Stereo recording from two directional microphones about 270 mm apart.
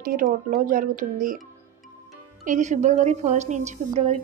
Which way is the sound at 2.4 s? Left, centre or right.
Right.